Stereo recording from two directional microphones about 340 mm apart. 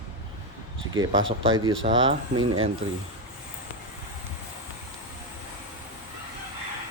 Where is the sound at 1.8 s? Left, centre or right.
Centre.